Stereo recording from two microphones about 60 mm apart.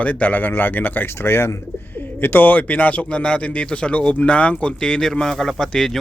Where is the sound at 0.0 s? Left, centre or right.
Left.